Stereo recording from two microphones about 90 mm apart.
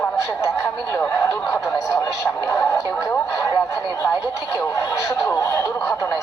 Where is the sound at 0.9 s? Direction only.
25° left (ahead or behind).